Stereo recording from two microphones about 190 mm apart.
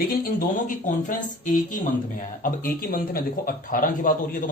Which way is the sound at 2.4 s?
50° left (ahead or behind).